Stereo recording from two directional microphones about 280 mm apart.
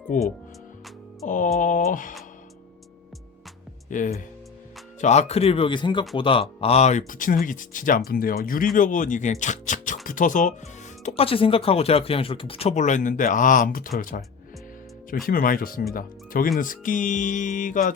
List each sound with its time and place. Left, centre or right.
0.1 s speech: left
1.3 s speech: left
3.8 s speech: left
15.3 s speech: left